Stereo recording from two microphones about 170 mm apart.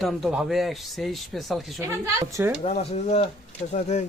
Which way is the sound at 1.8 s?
20° right (ahead or behind).